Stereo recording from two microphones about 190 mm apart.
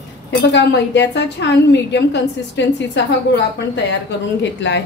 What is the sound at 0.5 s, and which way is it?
A woman's voice, 65° left (ahead or behind).